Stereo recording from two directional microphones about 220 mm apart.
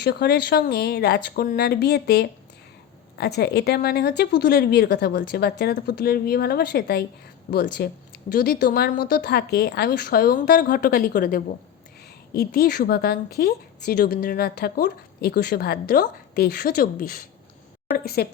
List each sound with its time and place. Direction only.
0.0 s a woman's voice: 45° left (ahead or behind)